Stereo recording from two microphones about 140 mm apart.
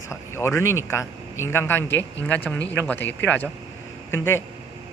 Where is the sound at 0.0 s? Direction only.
20° left (ahead or behind).